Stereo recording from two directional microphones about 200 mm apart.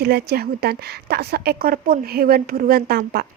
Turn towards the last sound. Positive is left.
turn(degrees=-50)  # may be behind; listen again after turning